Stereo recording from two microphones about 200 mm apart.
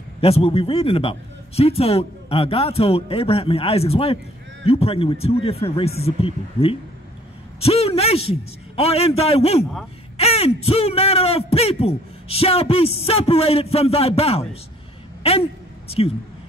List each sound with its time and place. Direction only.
0.2 s a man's voice: 30° left (ahead or behind)